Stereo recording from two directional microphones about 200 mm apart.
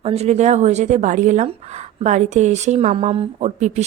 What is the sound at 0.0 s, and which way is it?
Speech, 30° right (ahead or behind).